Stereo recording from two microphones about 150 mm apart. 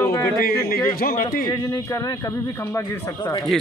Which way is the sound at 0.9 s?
75° left (ahead or behind).